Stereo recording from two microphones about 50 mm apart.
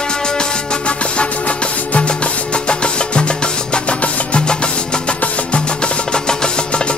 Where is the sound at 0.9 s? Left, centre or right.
Left.